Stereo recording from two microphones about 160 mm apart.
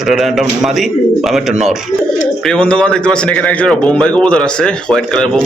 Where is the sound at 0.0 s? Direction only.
Centre (ahead or behind).